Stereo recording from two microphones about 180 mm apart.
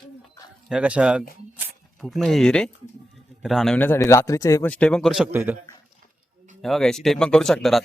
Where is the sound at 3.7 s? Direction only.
10° left (ahead or behind).